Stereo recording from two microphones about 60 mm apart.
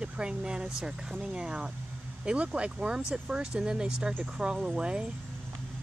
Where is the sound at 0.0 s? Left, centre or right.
Centre.